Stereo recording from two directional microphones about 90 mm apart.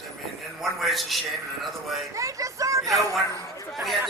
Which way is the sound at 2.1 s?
35° right (ahead or behind).